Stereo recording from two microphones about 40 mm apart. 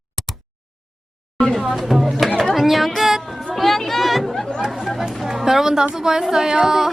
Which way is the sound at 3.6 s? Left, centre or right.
Centre.